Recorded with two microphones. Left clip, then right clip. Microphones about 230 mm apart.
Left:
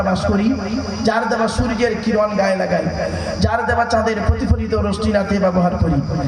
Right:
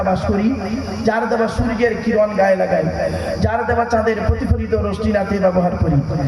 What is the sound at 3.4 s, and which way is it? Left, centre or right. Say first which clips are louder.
A man's voice: left 1 dB; left.